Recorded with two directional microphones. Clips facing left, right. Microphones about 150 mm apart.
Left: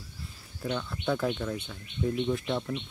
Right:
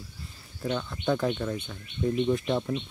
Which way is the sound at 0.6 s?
5° right (ahead or behind).